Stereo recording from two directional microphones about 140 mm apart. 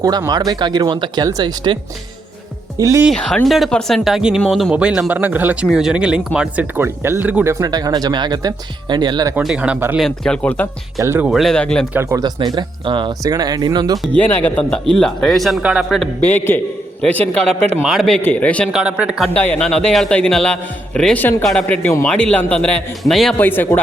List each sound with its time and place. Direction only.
0.0 s speech: 25° right (ahead or behind)
3.2 s speech: 5° left (ahead or behind)
4.7 s speech: 10° right (ahead or behind); by 9.3 s 30° right (ahead or behind)
9.4 s speech: 5° right (ahead or behind)
10.0 s a man's voice: 5° left (ahead or behind)
11.0 s speech: 15° right (ahead or behind)
11.3 s speech: centre (ahead or behind)
11.9 s speech: 20° right (ahead or behind)
14.2 s a man's voice: 15° left (ahead or behind); by 16.0 s centre (ahead or behind)
16.2 s a man's voice: 15° left (ahead or behind); by 18.2 s centre (ahead or behind)
18.2 s a man's voice: 10° left (ahead or behind)
18.7 s speech: 5° right (ahead or behind)
19.3 s a man's voice: 5° left (ahead or behind)
23.4 s a man's voice: 15° left (ahead or behind)